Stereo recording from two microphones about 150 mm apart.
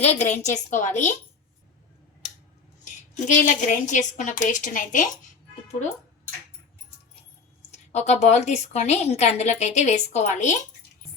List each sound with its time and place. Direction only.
0.0 s a woman's voice: 50° left (ahead or behind)
3.2 s a woman's voice: 55° left (ahead or behind)
7.7 s a woman's voice: 50° left (ahead or behind)